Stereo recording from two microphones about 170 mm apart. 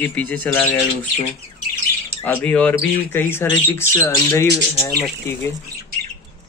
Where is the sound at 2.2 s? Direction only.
10° left (ahead or behind).